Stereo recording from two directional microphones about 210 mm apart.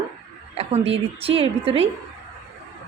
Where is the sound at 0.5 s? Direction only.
30° right (ahead or behind).